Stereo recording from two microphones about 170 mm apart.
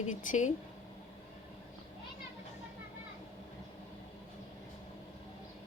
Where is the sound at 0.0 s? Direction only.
50° left (ahead or behind).